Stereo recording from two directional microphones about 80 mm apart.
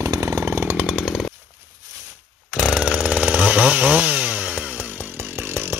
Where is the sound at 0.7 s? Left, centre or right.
Centre.